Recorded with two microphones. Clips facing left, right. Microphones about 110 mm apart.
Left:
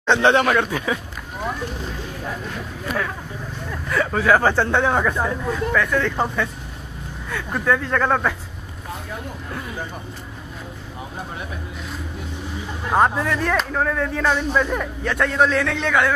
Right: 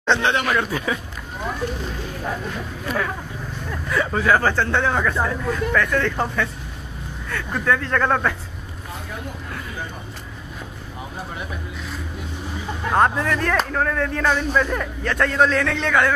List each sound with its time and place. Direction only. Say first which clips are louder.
0.0 s speech: left 4 dB; 15° left (ahead or behind)
0.6 s speech: left 2 dB; 10° right (ahead or behind)
3.7 s speech: left 1 dB; centre (ahead or behind)
4.4 s speech: left 2 dB; 10° left (ahead or behind)
12.9 s speech: even; 5° left (ahead or behind)